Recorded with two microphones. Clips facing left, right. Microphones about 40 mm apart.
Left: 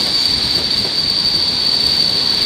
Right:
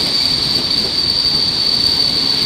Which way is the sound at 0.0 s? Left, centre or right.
Centre.